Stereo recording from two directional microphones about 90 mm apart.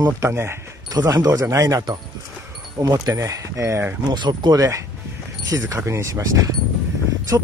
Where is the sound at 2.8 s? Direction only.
40° right (ahead or behind).